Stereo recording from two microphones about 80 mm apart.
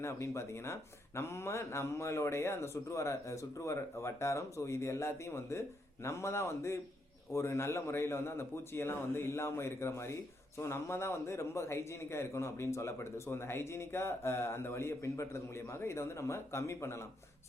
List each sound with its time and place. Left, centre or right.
0.0 s speech: left